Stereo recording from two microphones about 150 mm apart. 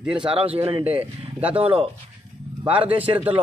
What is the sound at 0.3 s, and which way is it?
Speech, 40° right (ahead or behind).